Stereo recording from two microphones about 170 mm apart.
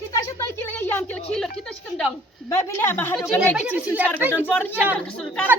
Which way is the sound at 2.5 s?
15° left (ahead or behind).